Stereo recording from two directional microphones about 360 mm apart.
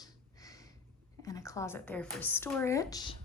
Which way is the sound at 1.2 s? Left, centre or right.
Centre.